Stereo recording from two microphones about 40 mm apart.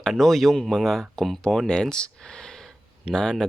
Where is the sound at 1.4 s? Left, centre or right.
Centre.